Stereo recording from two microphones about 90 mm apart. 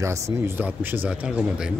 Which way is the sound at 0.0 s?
30° right (ahead or behind).